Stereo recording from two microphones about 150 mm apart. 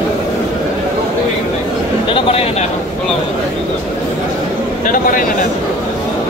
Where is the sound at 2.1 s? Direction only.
40° left (ahead or behind).